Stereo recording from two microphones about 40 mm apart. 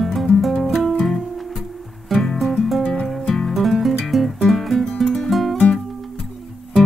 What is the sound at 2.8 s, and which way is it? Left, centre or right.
Music, left.